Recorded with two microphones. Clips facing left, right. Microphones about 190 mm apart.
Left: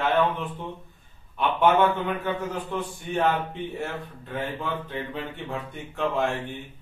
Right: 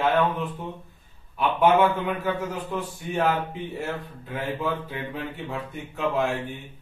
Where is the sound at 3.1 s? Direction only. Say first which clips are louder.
Even; 5° right (ahead or behind).